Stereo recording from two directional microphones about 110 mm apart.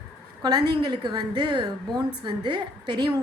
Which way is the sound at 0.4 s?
40° right (ahead or behind).